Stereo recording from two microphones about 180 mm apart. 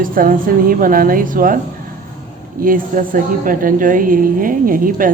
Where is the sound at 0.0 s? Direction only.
50° right (ahead or behind).